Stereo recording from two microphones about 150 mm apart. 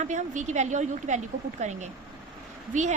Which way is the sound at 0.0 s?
55° right (ahead or behind).